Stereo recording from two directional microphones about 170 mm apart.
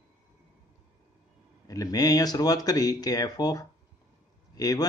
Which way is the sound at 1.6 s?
20° left (ahead or behind).